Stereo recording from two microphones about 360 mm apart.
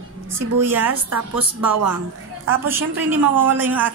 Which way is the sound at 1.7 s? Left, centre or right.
Right.